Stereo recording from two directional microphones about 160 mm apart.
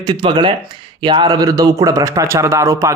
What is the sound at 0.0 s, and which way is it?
Speech, 30° right (ahead or behind).